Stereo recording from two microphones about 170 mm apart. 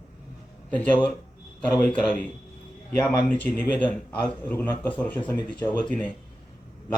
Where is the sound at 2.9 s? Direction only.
20° left (ahead or behind).